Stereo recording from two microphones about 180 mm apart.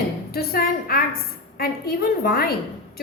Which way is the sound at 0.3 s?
55° left (ahead or behind).